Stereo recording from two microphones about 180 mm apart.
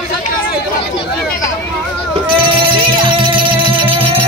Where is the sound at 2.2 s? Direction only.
30° right (ahead or behind).